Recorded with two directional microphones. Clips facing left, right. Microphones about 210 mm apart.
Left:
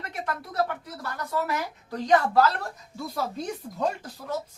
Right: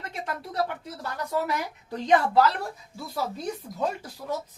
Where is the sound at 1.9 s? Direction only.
20° right (ahead or behind).